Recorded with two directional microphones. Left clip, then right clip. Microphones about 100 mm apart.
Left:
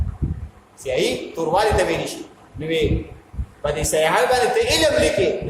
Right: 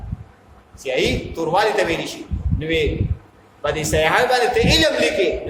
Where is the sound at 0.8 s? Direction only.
15° right (ahead or behind).